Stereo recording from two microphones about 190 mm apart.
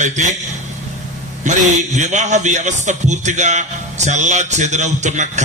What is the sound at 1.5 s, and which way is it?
A man's voice, 40° right (ahead or behind).